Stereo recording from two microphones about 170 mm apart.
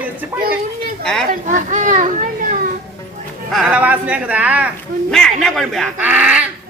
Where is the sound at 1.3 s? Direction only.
50° right (ahead or behind).